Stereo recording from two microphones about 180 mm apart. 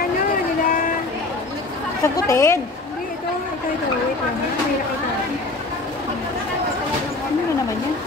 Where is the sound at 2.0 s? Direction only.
15° left (ahead or behind).